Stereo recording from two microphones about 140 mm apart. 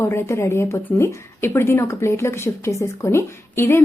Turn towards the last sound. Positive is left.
turn(degrees=20)  # may be behind; listen again after turning